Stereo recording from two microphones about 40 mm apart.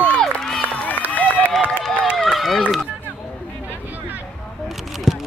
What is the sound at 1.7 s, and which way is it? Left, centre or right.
Run, centre.